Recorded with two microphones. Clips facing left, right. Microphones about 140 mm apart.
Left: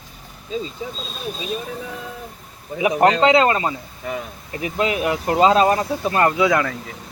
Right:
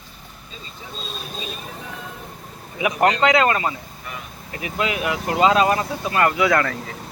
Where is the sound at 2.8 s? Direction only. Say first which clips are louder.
Left 3 dB; 30° left (ahead or behind).